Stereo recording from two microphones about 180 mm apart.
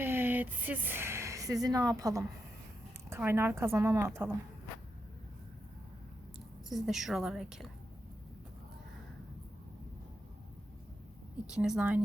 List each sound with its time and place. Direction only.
0.0 s a sound: 10° right (ahead or behind)
1.6 s a woman's voice: 20° right (ahead or behind)
6.7 s a woman's voice: centre (ahead or behind)
11.4 s a woman's voice: 5° right (ahead or behind)